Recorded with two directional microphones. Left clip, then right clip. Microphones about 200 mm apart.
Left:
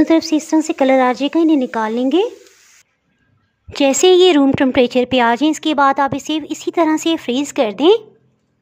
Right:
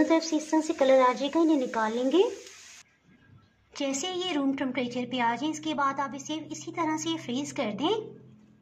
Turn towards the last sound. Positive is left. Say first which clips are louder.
# left 16 dB
turn(degrees=55)  # may be behind; listen again after turning